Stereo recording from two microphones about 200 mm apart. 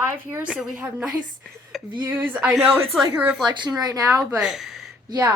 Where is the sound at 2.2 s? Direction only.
10° right (ahead or behind).